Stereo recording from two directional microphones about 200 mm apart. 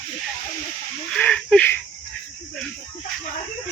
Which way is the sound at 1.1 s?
5° left (ahead or behind).